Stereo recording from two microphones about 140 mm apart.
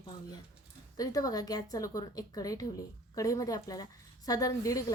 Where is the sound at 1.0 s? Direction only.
25° left (ahead or behind).